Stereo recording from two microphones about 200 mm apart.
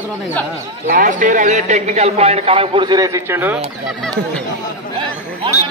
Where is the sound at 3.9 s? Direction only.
Centre (ahead or behind).